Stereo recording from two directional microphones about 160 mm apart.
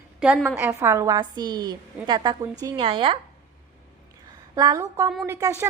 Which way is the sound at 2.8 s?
30° right (ahead or behind).